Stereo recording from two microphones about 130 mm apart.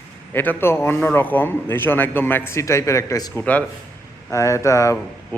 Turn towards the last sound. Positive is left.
turn(degrees=25)  # may be behind; listen again after turning